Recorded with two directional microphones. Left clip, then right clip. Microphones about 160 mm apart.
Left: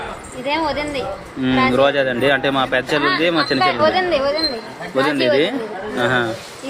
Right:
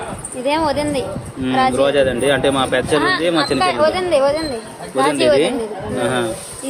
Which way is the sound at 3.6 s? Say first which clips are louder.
Left 2 dB; 90° right.